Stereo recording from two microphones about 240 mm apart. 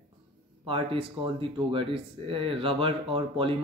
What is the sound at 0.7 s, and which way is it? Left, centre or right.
Speech, right.